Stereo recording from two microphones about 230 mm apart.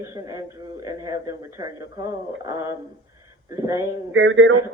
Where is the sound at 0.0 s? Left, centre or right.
Centre.